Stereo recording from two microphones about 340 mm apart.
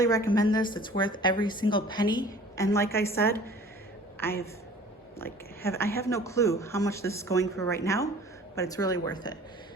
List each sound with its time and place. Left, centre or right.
0.0 s a man's voice: centre